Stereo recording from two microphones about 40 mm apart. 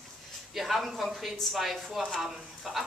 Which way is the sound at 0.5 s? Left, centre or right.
Centre.